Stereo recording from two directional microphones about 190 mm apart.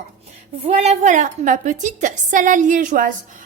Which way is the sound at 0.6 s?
35° right (ahead or behind).